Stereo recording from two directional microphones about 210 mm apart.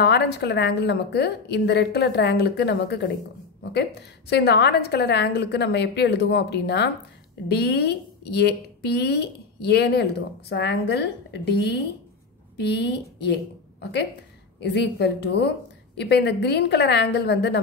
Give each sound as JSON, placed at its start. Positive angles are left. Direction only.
{"t": 0.0, "sound": "a woman's voice", "side_deg": 55}